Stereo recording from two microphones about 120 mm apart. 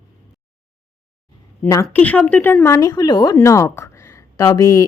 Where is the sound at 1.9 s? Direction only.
10° left (ahead or behind); by 3.4 s 35° left (ahead or behind).